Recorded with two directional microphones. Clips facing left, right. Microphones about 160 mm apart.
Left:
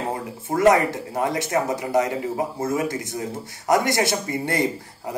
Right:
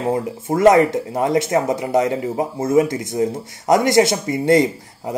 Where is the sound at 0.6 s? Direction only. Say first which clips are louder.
Right 5 dB; 20° right (ahead or behind).